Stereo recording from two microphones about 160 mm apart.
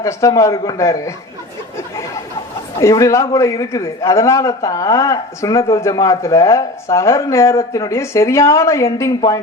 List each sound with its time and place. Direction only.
0.0 s speech: 20° left (ahead or behind)
2.8 s speech: 20° left (ahead or behind)